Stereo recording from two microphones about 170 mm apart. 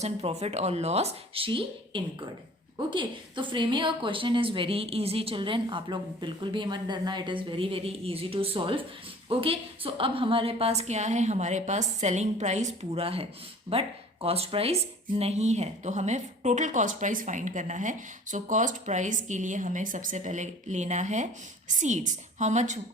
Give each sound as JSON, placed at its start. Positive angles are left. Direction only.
{"t": 0.0, "sound": "a woman's voice", "side_deg": -40}